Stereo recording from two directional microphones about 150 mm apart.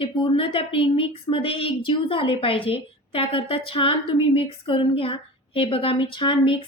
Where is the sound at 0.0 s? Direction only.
35° left (ahead or behind).